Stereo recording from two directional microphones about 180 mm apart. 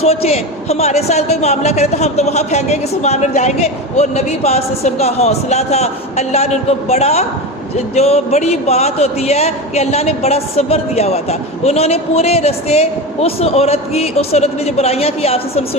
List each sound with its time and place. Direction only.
0.0 s speech: 35° left (ahead or behind)